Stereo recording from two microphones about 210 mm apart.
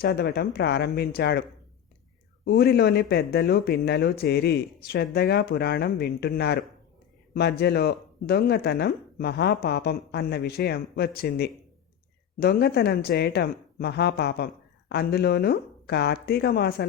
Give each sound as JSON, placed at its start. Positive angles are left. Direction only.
{"t": 0.0, "sound": "speech", "side_deg": 50}